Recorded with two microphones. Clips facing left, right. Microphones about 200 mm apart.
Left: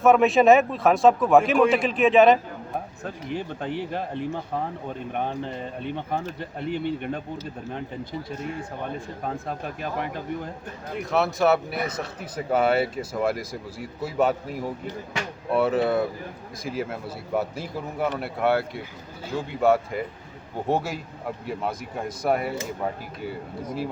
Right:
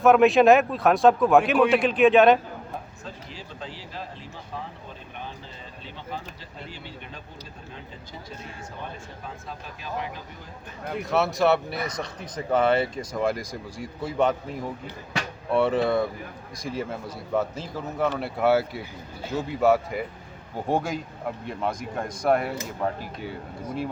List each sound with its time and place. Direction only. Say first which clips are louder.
0.0 s speech: right 1 dB; centre (ahead or behind)
3.0 s speech: left 9 dB; 60° left (ahead or behind)
9.2 s speech: left 9 dB; 55° left (ahead or behind)
11.1 s speech: left 1 dB; centre (ahead or behind)